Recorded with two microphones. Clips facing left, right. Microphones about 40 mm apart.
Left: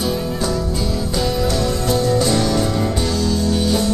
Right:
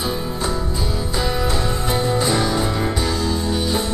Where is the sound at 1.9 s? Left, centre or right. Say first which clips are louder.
Left 2 dB; right.